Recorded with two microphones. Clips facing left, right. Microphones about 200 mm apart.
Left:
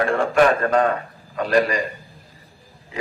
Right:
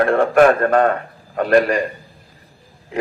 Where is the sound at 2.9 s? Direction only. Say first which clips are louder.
Right 8 dB; 55° right (ahead or behind).